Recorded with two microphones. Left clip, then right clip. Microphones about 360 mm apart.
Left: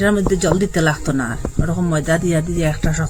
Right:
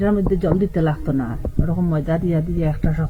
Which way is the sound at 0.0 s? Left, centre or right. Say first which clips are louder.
Left 3 dB; centre.